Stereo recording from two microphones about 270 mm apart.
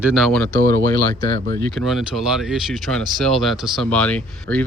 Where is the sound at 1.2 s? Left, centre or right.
Right.